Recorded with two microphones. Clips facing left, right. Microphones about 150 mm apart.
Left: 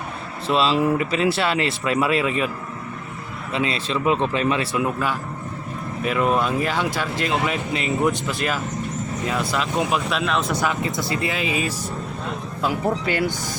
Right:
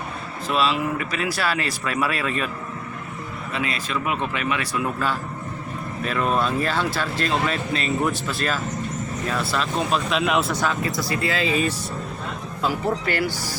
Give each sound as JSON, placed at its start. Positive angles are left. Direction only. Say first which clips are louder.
{"t": 0.4, "sound": "speech", "louder": "left 3 dB", "side_deg": 30}
{"t": 3.5, "sound": "speech", "louder": "left 4 dB", "side_deg": 25}
{"t": 6.0, "sound": "speech", "louder": "left 2 dB", "side_deg": 15}
{"t": 10.1, "sound": "speech", "louder": "right 1 dB", "side_deg": 0}
{"t": 10.5, "sound": "speech", "louder": "left 1 dB", "side_deg": 10}
{"t": 10.8, "sound": "speech", "louder": "even", "side_deg": 25}